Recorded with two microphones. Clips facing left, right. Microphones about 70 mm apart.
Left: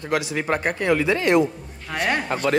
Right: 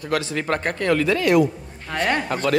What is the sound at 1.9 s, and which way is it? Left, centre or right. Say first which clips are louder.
Speech: right 1 dB; centre.